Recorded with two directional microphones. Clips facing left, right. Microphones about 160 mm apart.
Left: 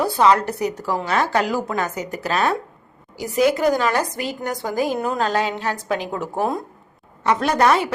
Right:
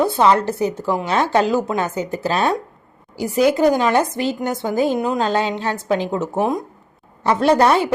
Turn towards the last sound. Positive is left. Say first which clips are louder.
# right 3 dB
turn(degrees=-30)  # may be behind; listen again after turning